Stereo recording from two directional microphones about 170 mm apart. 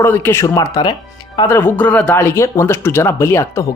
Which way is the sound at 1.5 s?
10° left (ahead or behind).